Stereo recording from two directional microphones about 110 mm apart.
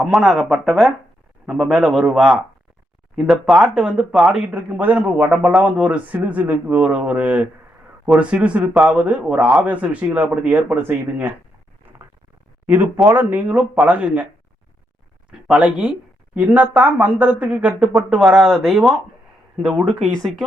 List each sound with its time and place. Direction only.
0.0 s speech: 5° right (ahead or behind)
8.7 s speech: centre (ahead or behind)
9.0 s speech: 15° right (ahead or behind)
11.9 s a sound: 20° right (ahead or behind)
12.6 s speech: 15° right (ahead or behind)
15.3 s speech: 5° right (ahead or behind)